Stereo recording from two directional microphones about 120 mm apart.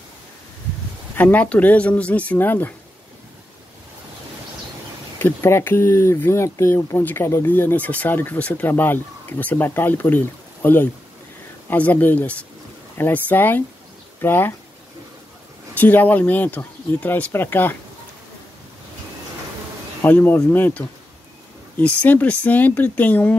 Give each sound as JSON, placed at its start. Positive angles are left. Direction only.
{"t": 1.1, "sound": "speech", "side_deg": 10}
{"t": 5.2, "sound": "speech", "side_deg": 20}
{"t": 15.7, "sound": "speech", "side_deg": 15}
{"t": 20.0, "sound": "speech", "side_deg": 15}